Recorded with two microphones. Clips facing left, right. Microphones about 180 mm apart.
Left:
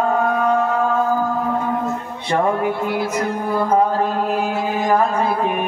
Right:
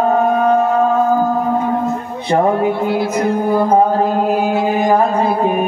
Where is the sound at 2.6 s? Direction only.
25° right (ahead or behind).